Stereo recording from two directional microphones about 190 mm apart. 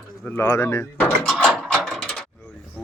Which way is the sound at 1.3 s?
Centre (ahead or behind).